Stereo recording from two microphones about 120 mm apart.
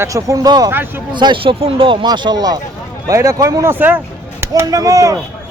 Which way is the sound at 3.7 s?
15° right (ahead or behind).